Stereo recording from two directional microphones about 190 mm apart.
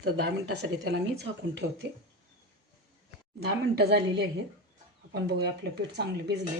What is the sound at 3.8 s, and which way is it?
Speech, 60° right (ahead or behind).